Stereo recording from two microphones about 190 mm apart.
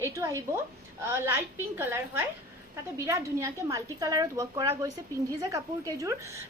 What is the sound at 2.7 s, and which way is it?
A woman's voice, 15° right (ahead or behind).